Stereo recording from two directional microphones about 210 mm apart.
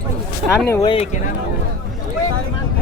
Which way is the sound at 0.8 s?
30° left (ahead or behind).